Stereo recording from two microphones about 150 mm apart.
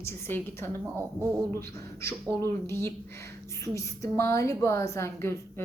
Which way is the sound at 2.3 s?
15° left (ahead or behind).